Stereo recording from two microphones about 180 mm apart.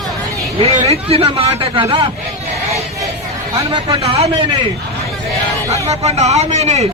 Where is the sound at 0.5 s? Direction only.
35° right (ahead or behind).